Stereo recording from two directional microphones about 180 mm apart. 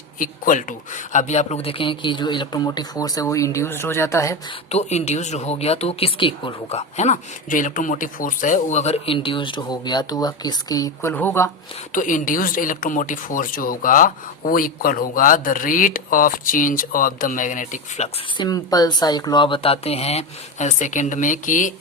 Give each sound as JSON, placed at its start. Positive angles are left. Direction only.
{"t": 0.2, "sound": "speech", "side_deg": 45}
{"t": 4.7, "sound": "speech", "side_deg": 40}
{"t": 11.9, "sound": "speech", "side_deg": 45}
{"t": 18.3, "sound": "speech", "side_deg": 20}